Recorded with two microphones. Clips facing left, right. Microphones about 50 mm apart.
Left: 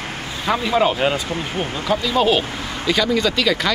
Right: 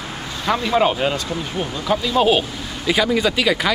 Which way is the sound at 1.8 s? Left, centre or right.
Centre.